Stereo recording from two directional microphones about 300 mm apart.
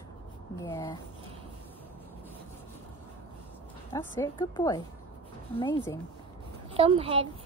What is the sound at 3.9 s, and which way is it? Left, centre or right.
Speech, centre.